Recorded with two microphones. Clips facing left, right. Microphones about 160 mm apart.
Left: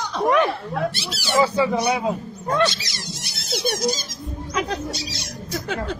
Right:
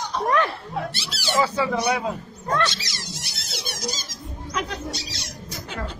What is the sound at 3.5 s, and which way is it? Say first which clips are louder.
Squeak: left 10 dB; 60° left (ahead or behind).